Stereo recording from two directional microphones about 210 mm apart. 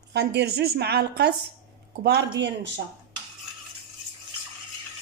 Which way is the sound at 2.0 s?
50° right (ahead or behind).